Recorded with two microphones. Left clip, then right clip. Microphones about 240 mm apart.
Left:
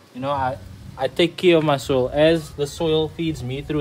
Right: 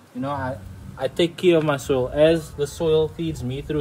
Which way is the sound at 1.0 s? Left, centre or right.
Centre.